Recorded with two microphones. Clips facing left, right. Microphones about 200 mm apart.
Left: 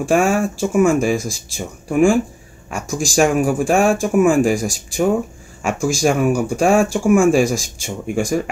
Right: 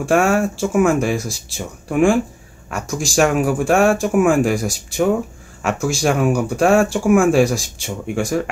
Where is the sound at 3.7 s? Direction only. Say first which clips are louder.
Right 1 dB; 65° right (ahead or behind).